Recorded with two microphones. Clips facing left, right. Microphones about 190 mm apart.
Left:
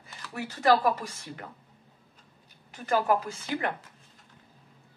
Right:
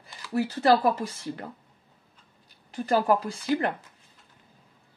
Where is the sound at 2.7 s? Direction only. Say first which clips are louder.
Right 3 dB; 35° right (ahead or behind).